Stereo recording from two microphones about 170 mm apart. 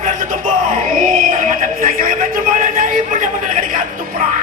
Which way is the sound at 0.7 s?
50° right (ahead or behind).